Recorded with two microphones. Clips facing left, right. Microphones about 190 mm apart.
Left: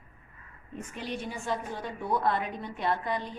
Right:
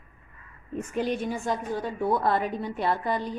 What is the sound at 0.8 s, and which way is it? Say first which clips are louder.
A woman's voice: right 9 dB; 45° right (ahead or behind).